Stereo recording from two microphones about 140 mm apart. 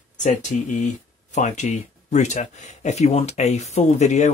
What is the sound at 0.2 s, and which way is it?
Speech, 60° left (ahead or behind).